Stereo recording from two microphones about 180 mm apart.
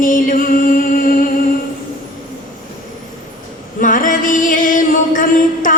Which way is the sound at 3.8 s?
50° left (ahead or behind).